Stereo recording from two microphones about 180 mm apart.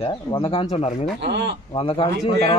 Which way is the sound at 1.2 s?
70° right (ahead or behind).